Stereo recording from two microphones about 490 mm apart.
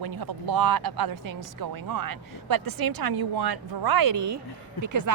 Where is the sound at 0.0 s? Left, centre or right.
Right.